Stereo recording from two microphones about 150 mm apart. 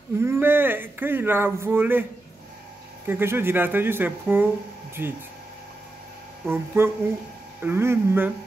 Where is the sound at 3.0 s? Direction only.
15° right (ahead or behind).